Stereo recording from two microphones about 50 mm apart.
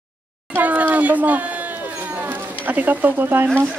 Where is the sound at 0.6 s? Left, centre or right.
Right.